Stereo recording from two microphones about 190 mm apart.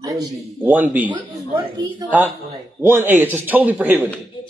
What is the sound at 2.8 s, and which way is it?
A man's voice, 10° right (ahead or behind).